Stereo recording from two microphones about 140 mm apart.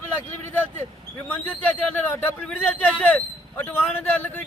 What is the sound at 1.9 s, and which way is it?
A man's voice, 10° left (ahead or behind).